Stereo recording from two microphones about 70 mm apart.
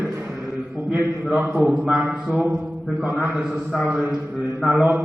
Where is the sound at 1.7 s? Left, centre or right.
Centre.